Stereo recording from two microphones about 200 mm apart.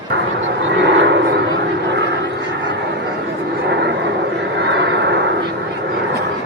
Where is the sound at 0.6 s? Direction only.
60° right (ahead or behind).